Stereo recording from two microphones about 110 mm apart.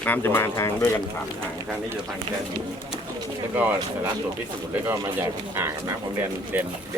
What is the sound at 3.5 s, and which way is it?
Speech, 15° right (ahead or behind).